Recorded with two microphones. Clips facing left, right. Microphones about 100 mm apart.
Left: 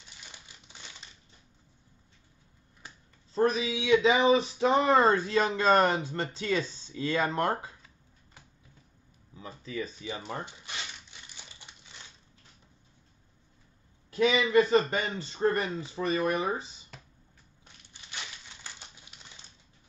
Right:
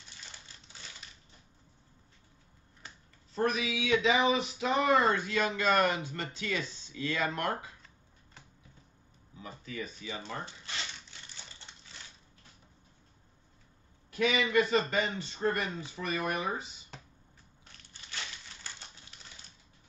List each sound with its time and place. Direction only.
0.2 s crumpling: 15° left (ahead or behind)
1.0 s crushing: 25° left (ahead or behind)
3.3 s speech: 30° left (ahead or behind)
9.4 s speech: 30° left (ahead or behind)
10.4 s a sound: 15° left (ahead or behind)
14.1 s speech: 30° left (ahead or behind)
17.6 s crushing: 15° left (ahead or behind)